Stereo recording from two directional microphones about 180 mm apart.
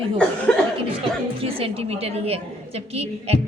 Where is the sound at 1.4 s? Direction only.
30° right (ahead or behind).